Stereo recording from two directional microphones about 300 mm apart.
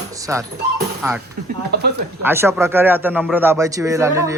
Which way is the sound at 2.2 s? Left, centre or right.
Centre.